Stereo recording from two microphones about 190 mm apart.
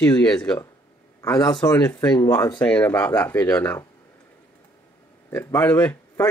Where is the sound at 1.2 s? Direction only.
20° left (ahead or behind).